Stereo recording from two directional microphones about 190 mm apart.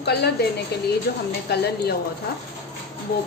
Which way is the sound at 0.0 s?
60° left (ahead or behind).